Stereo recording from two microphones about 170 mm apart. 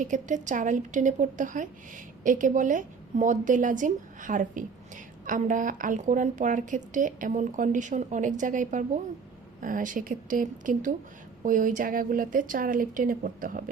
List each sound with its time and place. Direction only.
0.0 s a woman's voice: 45° right (ahead or behind)